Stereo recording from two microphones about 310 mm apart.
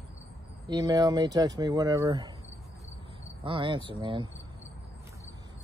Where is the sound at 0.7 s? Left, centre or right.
Centre.